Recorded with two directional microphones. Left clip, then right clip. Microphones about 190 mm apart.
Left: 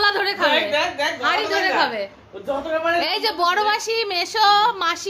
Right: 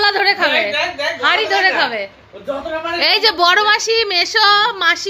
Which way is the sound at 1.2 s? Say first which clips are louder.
Right 8 dB; 20° right (ahead or behind).